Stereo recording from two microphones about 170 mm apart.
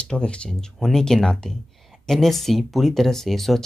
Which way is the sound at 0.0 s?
5° left (ahead or behind).